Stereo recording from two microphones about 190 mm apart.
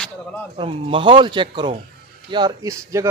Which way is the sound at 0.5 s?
30° right (ahead or behind).